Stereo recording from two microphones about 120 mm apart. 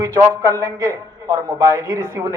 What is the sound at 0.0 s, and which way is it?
A man's voice, 25° right (ahead or behind).